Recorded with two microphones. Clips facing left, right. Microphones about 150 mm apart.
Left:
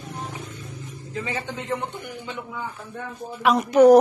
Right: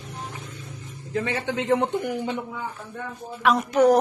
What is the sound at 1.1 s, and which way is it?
A man's voice, 80° right.